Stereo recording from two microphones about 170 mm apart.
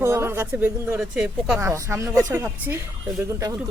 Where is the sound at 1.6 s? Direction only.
15° right (ahead or behind).